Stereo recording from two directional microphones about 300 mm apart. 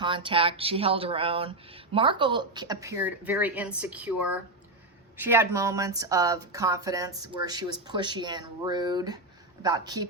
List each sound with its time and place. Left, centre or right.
0.0 s speech: centre